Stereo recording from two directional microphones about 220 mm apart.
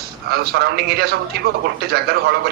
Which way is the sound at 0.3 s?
45° right (ahead or behind).